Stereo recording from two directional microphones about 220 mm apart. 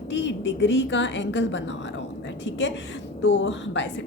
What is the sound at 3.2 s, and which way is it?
Speech, 60° left (ahead or behind).